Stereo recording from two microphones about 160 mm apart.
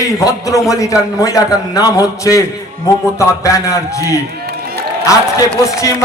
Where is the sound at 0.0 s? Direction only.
20° left (ahead or behind).